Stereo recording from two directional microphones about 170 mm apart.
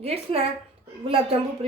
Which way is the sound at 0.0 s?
35° right (ahead or behind).